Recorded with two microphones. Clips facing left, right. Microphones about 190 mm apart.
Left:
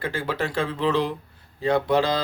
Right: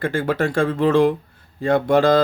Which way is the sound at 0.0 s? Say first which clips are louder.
Right 6 dB; 50° right (ahead or behind).